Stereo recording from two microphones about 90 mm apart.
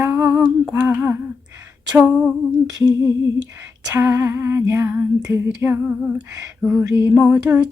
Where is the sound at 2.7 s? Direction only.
45° right (ahead or behind).